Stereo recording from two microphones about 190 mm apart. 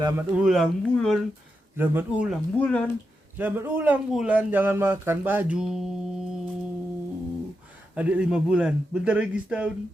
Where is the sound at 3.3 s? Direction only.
10° right (ahead or behind).